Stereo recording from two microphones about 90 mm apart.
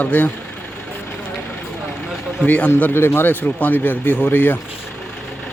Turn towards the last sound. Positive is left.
turn(degrees=20)  # may be behind; listen again after turning